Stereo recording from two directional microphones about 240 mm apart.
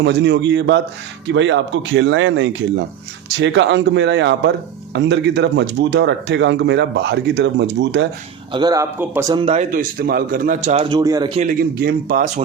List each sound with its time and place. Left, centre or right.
0.0 s speech: right
8.5 s a man's voice: centre
9.7 s a man's voice: right; by 11.3 s centre
11.8 s a man's voice: right